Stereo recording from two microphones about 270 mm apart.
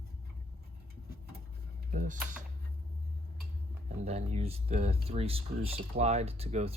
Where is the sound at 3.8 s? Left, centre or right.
Right.